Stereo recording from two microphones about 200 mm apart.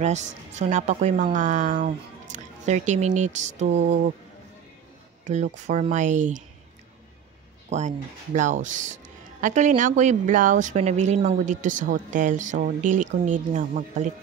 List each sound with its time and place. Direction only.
0.0 s a woman's voice: 35° right (ahead or behind)
5.2 s a woman's voice: 35° right (ahead or behind)
7.7 s a woman's voice: 35° right (ahead or behind)